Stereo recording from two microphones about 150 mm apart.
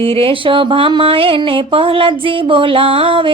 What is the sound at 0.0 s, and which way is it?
Mantra, 40° right (ahead or behind).